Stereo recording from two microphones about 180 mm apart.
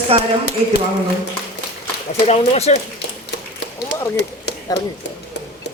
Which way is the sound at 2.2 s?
35° left (ahead or behind).